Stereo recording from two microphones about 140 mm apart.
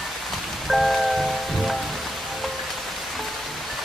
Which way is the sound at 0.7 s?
Centre (ahead or behind).